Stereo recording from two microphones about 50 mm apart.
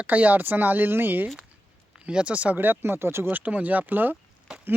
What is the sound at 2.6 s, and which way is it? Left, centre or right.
Speech, right.